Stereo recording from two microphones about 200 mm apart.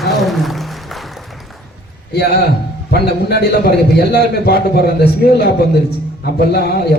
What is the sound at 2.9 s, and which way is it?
A man's voice, 50° left (ahead or behind).